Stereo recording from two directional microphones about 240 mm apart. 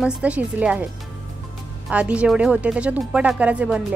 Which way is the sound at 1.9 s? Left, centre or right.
Centre.